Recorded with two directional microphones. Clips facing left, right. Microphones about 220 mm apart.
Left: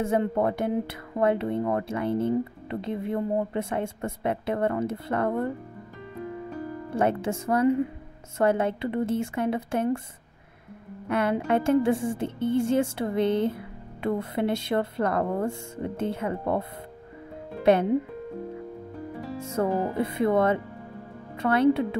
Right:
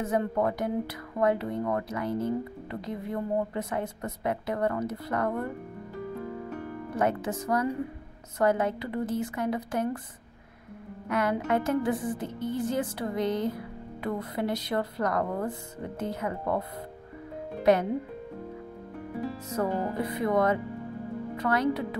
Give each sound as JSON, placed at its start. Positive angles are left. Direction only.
{"t": 0.0, "sound": "speech", "side_deg": 25}
{"t": 6.9, "sound": "speech", "side_deg": 30}
{"t": 11.1, "sound": "speech", "side_deg": 30}
{"t": 19.3, "sound": "speech", "side_deg": 25}